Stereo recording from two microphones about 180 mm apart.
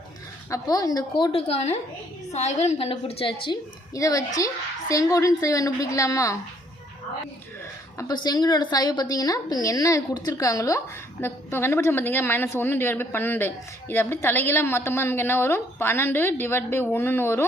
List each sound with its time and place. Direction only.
0.5 s a woman's voice: 20° left (ahead or behind)
7.9 s a woman's voice: 20° left (ahead or behind)